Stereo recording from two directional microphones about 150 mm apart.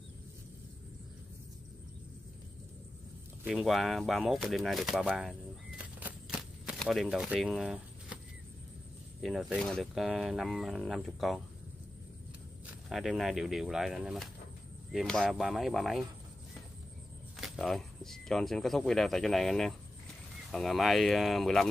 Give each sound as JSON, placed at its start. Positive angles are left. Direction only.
{"t": 3.4, "sound": "speech", "side_deg": 0}
{"t": 6.7, "sound": "speech", "side_deg": 0}
{"t": 9.2, "sound": "speech", "side_deg": 0}
{"t": 12.9, "sound": "speech", "side_deg": 0}
{"t": 17.4, "sound": "speech", "side_deg": 0}